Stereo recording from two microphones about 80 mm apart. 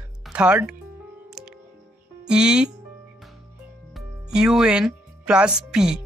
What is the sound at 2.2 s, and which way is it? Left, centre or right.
Speech, centre.